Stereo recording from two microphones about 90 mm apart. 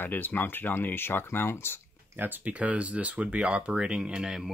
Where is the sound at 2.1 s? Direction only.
20° right (ahead or behind).